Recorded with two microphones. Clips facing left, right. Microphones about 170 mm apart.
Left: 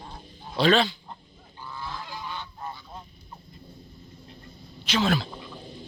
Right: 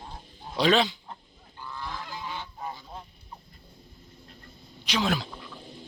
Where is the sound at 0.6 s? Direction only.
15° right (ahead or behind).